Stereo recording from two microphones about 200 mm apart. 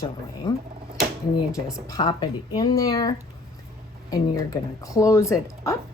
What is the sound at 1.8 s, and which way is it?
A woman's voice, 20° left (ahead or behind).